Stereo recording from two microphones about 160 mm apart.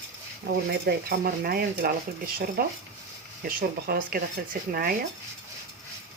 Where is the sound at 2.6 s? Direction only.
65° right (ahead or behind).